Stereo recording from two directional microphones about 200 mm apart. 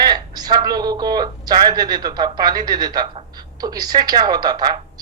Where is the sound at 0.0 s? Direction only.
20° right (ahead or behind).